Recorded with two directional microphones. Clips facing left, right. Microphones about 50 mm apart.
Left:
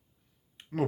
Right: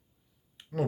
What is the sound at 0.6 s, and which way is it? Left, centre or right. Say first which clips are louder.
Finger snapping: even; left.